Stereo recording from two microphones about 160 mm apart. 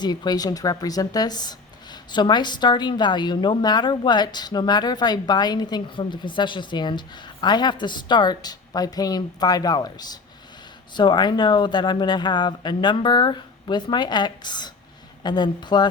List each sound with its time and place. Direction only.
0.0 s speech: 25° left (ahead or behind)